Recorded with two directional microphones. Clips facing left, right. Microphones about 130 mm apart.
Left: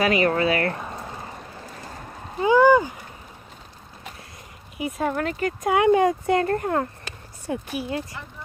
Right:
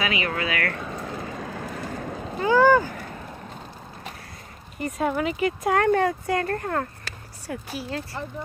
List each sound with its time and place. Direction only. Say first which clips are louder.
0.0 s speech: left 7 dB; 40° left (ahead or behind)
1.3 s vehicle: right 6 dB; 90° right
2.4 s speech: left 2 dB; 15° left (ahead or behind)
4.7 s speech: even; 5° left (ahead or behind)
5.7 s speech: left 3 dB; 10° left (ahead or behind)